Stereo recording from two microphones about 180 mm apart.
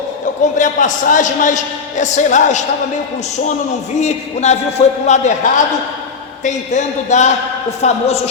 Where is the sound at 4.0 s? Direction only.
40° left (ahead or behind).